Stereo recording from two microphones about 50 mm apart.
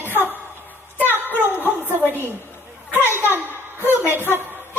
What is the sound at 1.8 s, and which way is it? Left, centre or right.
Speech, right.